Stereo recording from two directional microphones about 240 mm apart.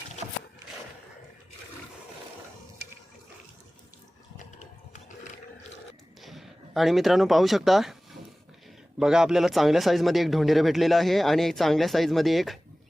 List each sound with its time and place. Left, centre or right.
6.2 s speech: centre
9.0 s speech: centre